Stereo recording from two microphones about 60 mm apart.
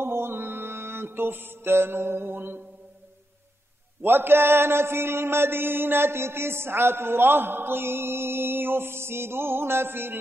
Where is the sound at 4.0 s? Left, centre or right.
Right.